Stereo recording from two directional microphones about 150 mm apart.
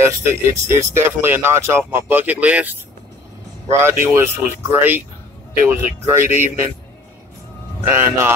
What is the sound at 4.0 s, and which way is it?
Speech, 15° right (ahead or behind).